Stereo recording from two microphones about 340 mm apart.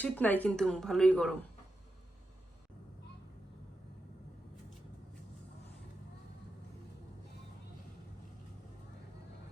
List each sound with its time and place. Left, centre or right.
0.0 s a woman's voice: centre